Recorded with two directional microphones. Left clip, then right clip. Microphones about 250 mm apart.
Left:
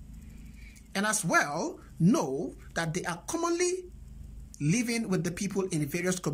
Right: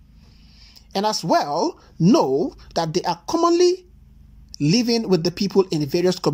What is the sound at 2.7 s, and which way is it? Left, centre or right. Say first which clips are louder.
Speech: right 11 dB; centre.